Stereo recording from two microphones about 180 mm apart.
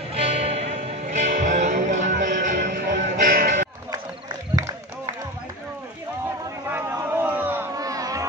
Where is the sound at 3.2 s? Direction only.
45° right (ahead or behind).